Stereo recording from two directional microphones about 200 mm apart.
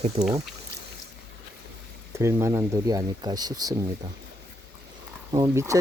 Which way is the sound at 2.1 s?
15° right (ahead or behind).